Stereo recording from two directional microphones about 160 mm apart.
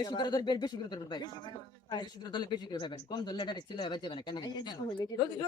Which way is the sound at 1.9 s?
25° left (ahead or behind).